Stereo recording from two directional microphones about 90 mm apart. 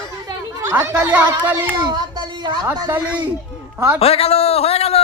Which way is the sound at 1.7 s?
50° right (ahead or behind).